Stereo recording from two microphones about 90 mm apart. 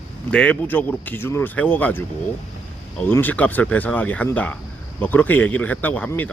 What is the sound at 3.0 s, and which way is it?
Speech, 20° left (ahead or behind).